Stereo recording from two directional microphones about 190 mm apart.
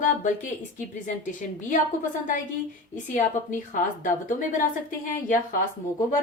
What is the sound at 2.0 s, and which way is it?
Speech, 45° left (ahead or behind).